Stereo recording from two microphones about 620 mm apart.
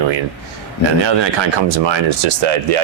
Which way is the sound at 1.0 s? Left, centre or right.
Right.